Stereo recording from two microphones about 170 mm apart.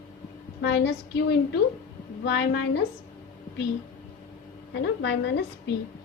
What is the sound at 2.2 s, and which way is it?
Speech, 90° left.